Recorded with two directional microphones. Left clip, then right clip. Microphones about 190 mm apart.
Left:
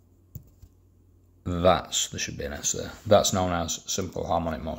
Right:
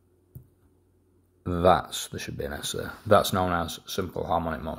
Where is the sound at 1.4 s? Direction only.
5° right (ahead or behind).